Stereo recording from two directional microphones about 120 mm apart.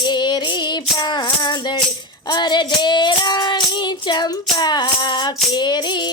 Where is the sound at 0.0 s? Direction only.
40° left (ahead or behind).